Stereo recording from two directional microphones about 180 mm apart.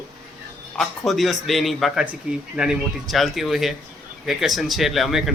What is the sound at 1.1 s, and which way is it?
Speech, centre (ahead or behind).